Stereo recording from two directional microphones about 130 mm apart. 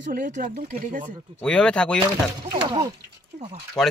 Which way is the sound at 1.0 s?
10° left (ahead or behind).